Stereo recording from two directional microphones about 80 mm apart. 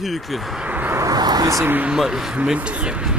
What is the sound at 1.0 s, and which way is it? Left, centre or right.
Vehicle, right.